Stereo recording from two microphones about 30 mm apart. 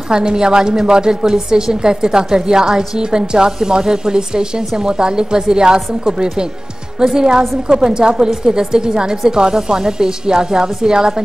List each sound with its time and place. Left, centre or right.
0.1 s a woman's voice: right